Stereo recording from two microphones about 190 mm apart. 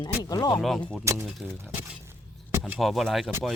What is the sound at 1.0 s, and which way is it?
Speech, 15° right (ahead or behind).